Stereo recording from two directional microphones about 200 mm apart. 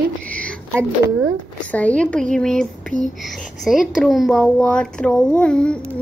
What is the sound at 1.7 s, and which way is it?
A child's voice, 5° left (ahead or behind).